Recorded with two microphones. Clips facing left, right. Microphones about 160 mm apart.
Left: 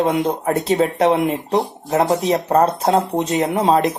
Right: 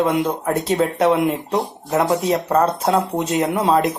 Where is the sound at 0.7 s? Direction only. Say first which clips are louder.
Left 1 dB; 20° left (ahead or behind).